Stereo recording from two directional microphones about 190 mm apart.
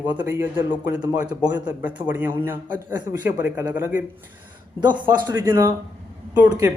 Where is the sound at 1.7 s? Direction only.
10° right (ahead or behind).